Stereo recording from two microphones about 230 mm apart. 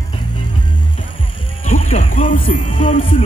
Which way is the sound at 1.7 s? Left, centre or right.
Left.